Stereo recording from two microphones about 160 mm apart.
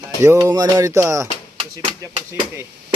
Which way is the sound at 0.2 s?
15° right (ahead or behind).